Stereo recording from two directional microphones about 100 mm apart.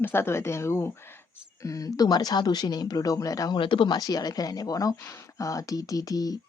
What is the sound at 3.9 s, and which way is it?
A woman's voice, 40° left (ahead or behind).